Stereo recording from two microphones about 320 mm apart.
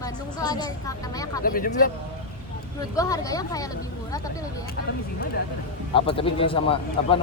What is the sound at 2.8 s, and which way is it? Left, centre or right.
Speech, centre.